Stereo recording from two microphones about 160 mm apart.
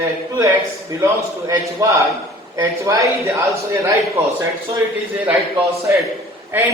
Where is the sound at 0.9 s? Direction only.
20° right (ahead or behind).